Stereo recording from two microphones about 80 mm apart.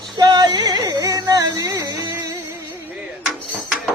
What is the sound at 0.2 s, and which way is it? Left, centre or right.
Music, right.